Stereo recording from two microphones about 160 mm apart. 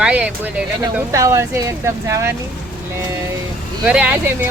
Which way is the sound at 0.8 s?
20° right (ahead or behind).